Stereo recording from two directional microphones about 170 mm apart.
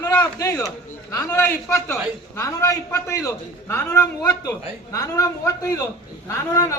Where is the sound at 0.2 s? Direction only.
20° left (ahead or behind).